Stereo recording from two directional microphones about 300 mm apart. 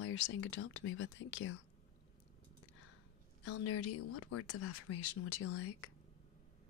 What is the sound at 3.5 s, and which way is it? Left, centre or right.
Speech, left.